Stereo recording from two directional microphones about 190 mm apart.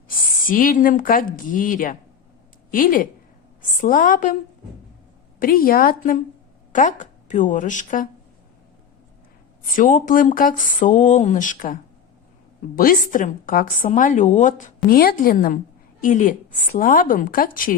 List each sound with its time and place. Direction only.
0.2 s a woman's voice: 45° left (ahead or behind)
5.4 s a woman's voice: 50° left (ahead or behind)
9.7 s a woman's voice: 45° left (ahead or behind)